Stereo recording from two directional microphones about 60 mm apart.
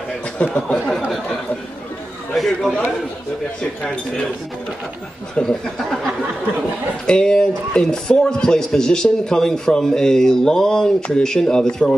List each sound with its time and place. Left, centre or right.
0.4 s speech: centre
2.3 s a man's voice: centre
5.3 s speech: centre
7.1 s speech: centre